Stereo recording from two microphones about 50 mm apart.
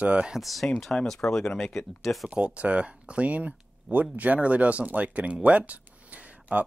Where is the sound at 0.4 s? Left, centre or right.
Centre.